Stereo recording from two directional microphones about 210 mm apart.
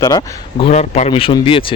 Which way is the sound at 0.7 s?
30° left (ahead or behind).